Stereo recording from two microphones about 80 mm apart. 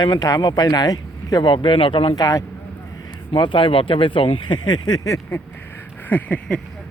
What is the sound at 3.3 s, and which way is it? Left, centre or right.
Speech, left.